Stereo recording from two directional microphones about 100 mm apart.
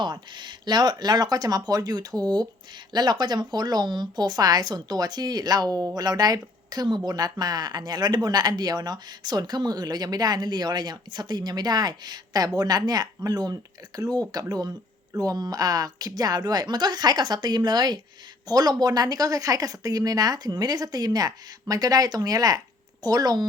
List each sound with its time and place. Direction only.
0.0 s a woman's voice: 50° right (ahead or behind)